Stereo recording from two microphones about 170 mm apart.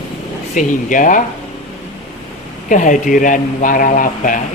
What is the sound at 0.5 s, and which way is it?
Speech, 50° left (ahead or behind).